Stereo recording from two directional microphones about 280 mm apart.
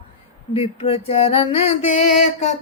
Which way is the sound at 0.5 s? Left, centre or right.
Left.